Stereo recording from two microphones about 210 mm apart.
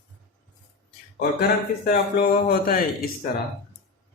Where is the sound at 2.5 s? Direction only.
45° left (ahead or behind).